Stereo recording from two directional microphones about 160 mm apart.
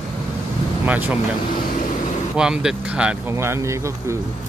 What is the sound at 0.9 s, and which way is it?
Speech, 10° right (ahead or behind).